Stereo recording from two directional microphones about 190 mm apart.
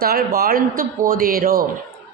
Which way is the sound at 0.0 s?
50° right (ahead or behind).